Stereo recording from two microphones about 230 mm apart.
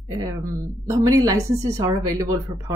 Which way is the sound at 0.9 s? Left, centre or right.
Centre.